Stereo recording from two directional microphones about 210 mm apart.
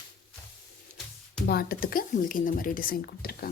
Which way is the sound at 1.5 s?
45° left (ahead or behind).